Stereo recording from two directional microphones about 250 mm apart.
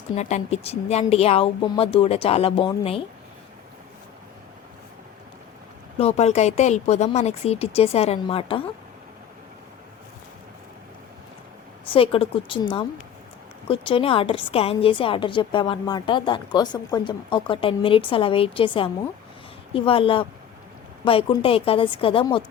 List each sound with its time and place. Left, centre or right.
0.2 s a woman's voice: left
6.0 s a woman's voice: left
11.9 s a woman's voice: left